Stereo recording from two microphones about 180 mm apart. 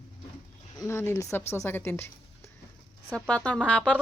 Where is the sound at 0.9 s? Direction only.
15° left (ahead or behind).